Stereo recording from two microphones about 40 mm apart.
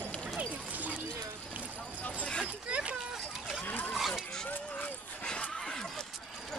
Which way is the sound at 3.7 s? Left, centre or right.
Left.